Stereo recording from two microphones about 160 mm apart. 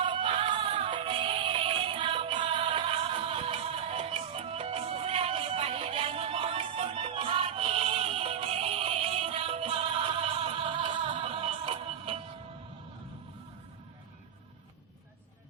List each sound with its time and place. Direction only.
0.0 s music: 30° right (ahead or behind)